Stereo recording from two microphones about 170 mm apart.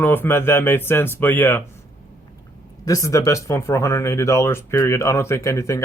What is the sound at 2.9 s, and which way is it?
Speech, 20° left (ahead or behind).